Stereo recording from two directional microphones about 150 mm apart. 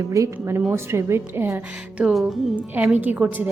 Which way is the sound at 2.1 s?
Centre (ahead or behind).